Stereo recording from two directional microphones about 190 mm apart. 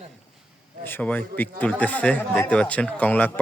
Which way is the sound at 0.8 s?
10° left (ahead or behind).